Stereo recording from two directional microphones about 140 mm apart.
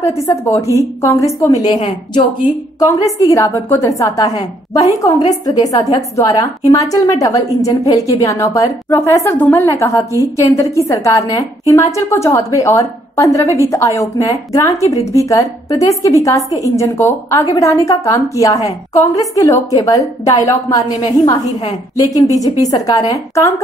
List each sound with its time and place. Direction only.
0.0 s a woman's voice: 20° left (ahead or behind)